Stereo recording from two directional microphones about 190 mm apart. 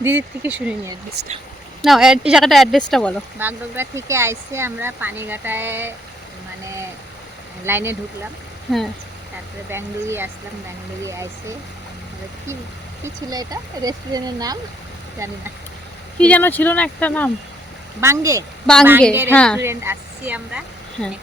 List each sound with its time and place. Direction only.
0.0 s speech: 10° right (ahead or behind)
1.2 s speech: 60° right (ahead or behind)
1.8 s speech: centre (ahead or behind)
3.3 s speech: 10° right (ahead or behind)
7.6 s speech: 10° right (ahead or behind)
9.6 s speech: 10° right (ahead or behind)
13.3 s speech: 20° right (ahead or behind)
16.1 s speech: 5° left (ahead or behind)
18.0 s speech: 15° right (ahead or behind)
18.6 s a woman's voice: 5° left (ahead or behind)
19.5 s a woman's voice: 15° right (ahead or behind)